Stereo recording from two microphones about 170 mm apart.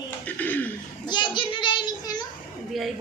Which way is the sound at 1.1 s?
25° left (ahead or behind).